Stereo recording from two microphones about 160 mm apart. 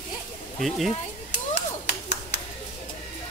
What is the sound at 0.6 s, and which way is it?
Speech, centre (ahead or behind).